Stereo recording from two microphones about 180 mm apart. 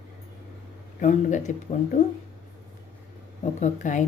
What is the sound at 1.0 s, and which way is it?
Speech, 40° left (ahead or behind).